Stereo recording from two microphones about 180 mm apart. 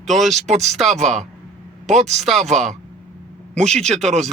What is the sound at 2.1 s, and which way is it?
Speech, centre (ahead or behind).